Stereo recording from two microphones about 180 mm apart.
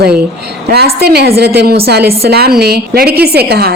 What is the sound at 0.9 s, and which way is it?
A woman's voice, 65° right (ahead or behind).